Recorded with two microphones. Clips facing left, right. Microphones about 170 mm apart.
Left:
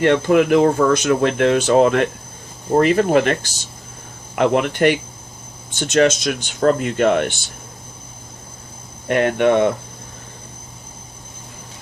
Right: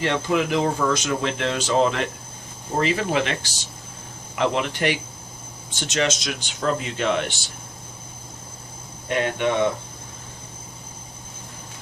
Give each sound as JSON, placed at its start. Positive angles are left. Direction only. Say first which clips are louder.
{"t": 0.0, "sound": "speech", "louder": "left 8 dB", "side_deg": 55}
{"t": 9.0, "sound": "speech", "louder": "left 7 dB", "side_deg": 55}